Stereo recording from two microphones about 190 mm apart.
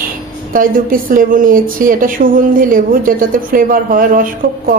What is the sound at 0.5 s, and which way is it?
A woman's voice, 45° right (ahead or behind).